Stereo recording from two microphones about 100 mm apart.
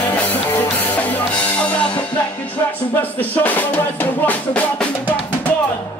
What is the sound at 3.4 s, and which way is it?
Music, 15° left (ahead or behind).